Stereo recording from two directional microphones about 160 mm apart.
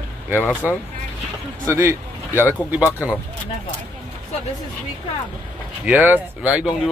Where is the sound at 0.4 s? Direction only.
10° left (ahead or behind).